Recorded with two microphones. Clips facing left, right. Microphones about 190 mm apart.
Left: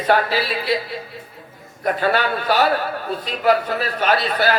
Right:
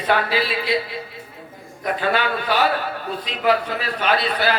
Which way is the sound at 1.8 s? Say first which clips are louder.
Left 2 dB; 45° left (ahead or behind).